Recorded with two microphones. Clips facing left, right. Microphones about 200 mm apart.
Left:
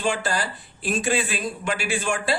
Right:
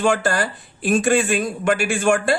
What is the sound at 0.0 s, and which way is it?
Speech, 50° right (ahead or behind).